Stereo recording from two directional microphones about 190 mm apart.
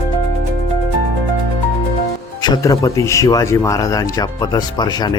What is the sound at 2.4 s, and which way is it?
A man's voice, 20° left (ahead or behind).